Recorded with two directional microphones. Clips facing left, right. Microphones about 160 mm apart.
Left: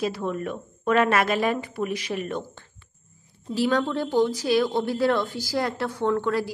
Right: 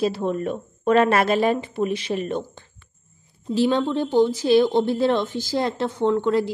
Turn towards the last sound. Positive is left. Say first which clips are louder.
# right 4 dB
turn(degrees=-20)  # may be behind; listen again after turning